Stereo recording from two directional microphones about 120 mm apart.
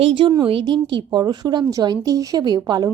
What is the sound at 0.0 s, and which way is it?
A woman's voice, 45° right (ahead or behind).